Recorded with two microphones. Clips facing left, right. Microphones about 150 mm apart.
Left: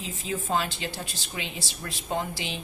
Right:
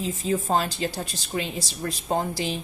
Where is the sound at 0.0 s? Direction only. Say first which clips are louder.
Right 7 dB; 40° right (ahead or behind).